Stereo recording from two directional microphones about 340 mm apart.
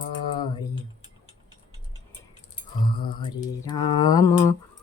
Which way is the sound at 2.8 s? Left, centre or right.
Centre.